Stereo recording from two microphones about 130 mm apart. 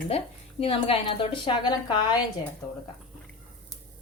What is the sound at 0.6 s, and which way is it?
Speech, 45° left (ahead or behind).